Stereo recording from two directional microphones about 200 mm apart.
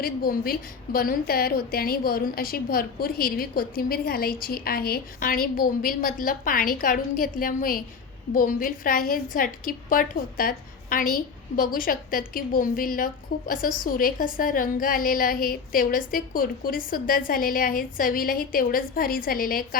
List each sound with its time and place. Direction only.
0.0 s a woman's voice: 50° left (ahead or behind)